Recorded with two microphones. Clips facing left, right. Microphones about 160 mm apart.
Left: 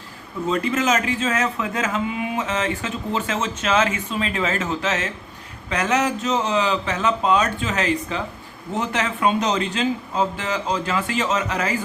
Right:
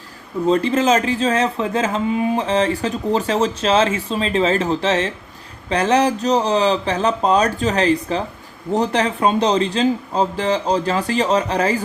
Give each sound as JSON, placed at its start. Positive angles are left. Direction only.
{"t": 0.4, "sound": "speech", "side_deg": -30}